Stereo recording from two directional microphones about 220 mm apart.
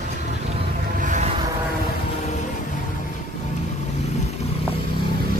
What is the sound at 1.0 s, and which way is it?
Vehicle, 35° right (ahead or behind).